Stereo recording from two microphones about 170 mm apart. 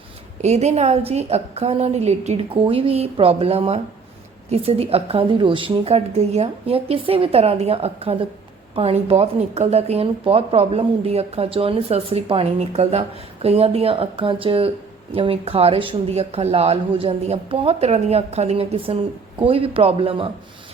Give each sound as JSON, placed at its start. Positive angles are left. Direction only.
{"t": 0.4, "sound": "speech", "side_deg": -40}